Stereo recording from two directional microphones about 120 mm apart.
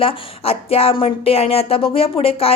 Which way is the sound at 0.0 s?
55° left (ahead or behind).